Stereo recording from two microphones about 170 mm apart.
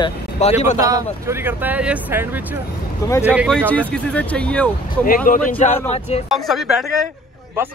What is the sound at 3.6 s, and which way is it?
Speech, 10° left (ahead or behind).